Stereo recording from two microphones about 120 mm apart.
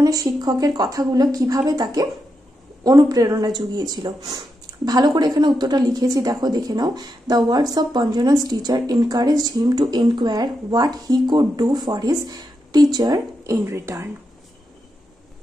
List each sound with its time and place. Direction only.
0.0 s a woman's voice: 30° right (ahead or behind)